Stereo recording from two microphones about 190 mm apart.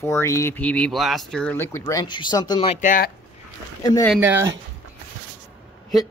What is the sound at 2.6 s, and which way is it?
Speech, 40° left (ahead or behind).